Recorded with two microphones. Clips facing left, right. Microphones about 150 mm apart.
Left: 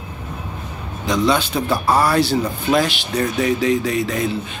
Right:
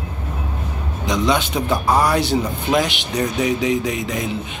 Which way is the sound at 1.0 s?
20° right (ahead or behind).